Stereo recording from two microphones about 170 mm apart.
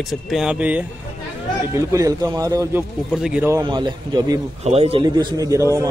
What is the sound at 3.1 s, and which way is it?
Speech, 5° right (ahead or behind).